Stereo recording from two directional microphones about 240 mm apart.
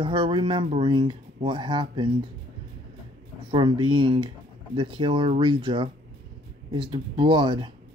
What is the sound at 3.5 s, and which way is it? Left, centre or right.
Speech, centre.